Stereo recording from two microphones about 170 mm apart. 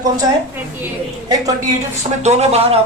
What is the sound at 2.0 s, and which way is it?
Speech, 40° right (ahead or behind).